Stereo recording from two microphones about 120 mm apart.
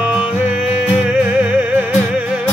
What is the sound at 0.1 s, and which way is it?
Music, 10° right (ahead or behind).